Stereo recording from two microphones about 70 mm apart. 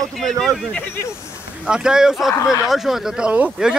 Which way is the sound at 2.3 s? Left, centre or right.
Left.